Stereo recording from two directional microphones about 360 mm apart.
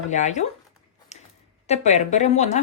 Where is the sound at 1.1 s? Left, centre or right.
Centre.